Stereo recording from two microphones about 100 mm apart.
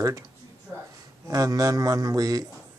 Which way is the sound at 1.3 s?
35° right (ahead or behind).